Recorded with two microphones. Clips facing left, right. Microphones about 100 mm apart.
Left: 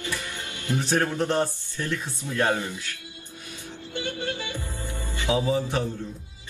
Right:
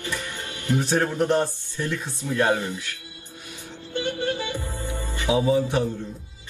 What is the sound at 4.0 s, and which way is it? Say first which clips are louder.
Music: right 5 dB; 20° right (ahead or behind).